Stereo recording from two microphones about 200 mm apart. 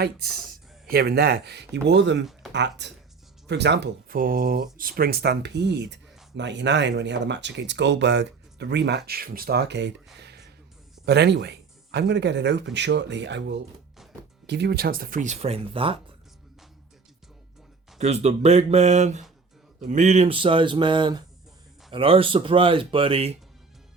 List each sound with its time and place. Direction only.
0.0 s speech: 50° right (ahead or behind)
10.2 s a sound: 55° right (ahead or behind)
11.0 s speech: 55° right (ahead or behind); by 16.0 s 25° right (ahead or behind)
18.0 s speech: 35° right (ahead or behind)